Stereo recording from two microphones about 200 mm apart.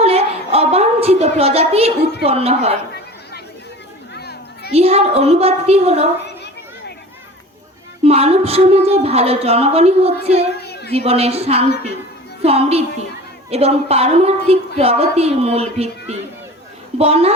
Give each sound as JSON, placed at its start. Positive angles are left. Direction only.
{"t": 0.0, "sound": "a sound", "side_deg": -30}
{"t": 2.2, "sound": "a woman's voice", "side_deg": -30}
{"t": 4.1, "sound": "children playing", "side_deg": 55}
{"t": 4.7, "sound": "a woman's voice", "side_deg": -30}
{"t": 6.2, "sound": "children playing", "side_deg": 60}
{"t": 8.0, "sound": "a woman's voice", "side_deg": -30}
{"t": 10.6, "sound": "a sound", "side_deg": 55}
{"t": 10.9, "sound": "a woman's voice", "side_deg": -30}